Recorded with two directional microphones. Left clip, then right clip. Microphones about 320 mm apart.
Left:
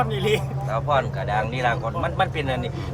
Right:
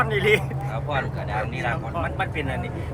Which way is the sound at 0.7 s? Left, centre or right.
Left.